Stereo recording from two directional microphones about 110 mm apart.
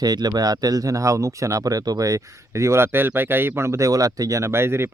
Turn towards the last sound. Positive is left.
turn(degrees=-20)  # may be behind; listen again after turning